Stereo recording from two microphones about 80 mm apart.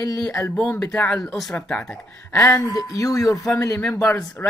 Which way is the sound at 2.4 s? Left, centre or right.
Left.